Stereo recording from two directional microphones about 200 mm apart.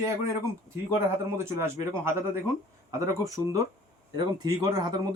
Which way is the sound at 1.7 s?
10° right (ahead or behind).